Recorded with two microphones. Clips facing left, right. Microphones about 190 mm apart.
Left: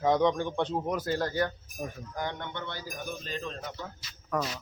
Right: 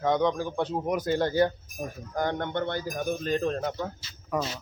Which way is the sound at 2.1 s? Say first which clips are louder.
Right 8 dB; 50° right (ahead or behind).